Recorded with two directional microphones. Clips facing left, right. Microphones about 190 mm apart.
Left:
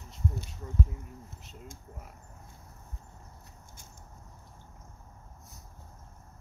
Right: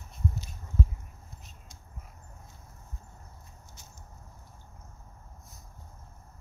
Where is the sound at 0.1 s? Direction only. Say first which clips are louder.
Even; 80° left.